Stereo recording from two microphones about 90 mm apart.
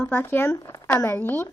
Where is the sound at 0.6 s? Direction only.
45° left (ahead or behind).